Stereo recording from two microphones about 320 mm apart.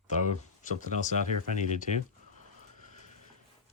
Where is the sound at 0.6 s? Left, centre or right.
Left.